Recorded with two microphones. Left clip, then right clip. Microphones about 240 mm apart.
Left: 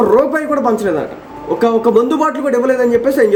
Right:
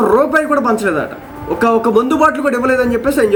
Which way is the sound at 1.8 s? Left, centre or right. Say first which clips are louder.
Right 1 dB; centre.